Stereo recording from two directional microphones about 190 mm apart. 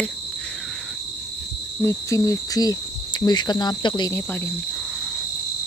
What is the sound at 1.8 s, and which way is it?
Speech, 15° left (ahead or behind).